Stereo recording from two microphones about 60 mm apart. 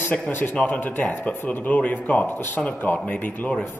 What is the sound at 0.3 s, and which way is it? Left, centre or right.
Speech, left.